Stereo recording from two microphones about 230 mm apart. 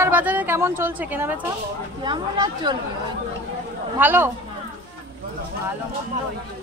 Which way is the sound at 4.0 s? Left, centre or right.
Centre.